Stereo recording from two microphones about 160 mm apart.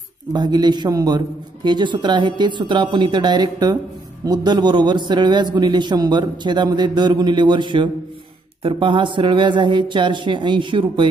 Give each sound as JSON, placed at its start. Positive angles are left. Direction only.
{"t": 0.3, "sound": "a man's voice", "side_deg": -25}